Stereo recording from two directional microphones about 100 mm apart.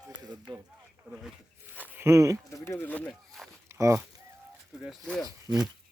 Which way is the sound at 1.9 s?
30° right (ahead or behind).